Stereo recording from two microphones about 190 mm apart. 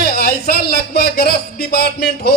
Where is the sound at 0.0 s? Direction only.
55° left (ahead or behind).